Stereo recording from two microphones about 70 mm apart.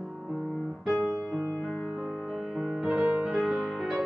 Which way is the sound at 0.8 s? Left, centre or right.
Centre.